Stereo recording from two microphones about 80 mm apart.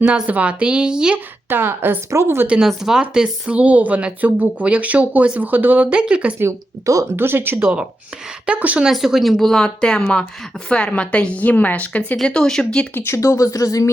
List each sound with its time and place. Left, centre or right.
0.0 s speech: centre
1.5 s speech: right
2.6 s speech: centre
6.8 s speech: right
8.4 s speech: centre
8.9 s a woman's voice: centre
12.1 s a woman's voice: centre
12.9 s speech: left
13.1 s speech: left